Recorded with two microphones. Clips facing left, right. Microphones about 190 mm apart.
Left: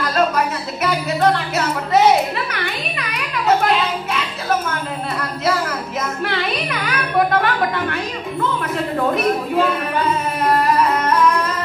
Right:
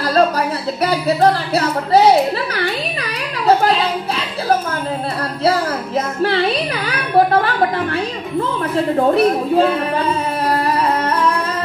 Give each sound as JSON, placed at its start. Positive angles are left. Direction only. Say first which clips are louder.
{"t": 0.8, "sound": "speech", "louder": "right 3 dB", "side_deg": -35}
{"t": 3.4, "sound": "music", "louder": "right 3 dB", "side_deg": -35}
{"t": 5.4, "sound": "child singing", "louder": "right 4 dB", "side_deg": -30}
{"t": 10.6, "sound": "music", "louder": "even", "side_deg": -30}